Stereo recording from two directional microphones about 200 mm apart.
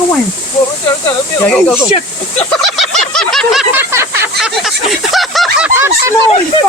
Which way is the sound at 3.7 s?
10° right (ahead or behind).